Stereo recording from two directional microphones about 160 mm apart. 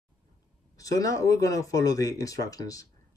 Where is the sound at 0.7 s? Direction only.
20° left (ahead or behind).